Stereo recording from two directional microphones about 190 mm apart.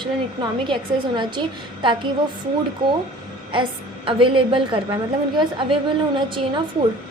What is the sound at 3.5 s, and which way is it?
A woman's voice, 25° right (ahead or behind).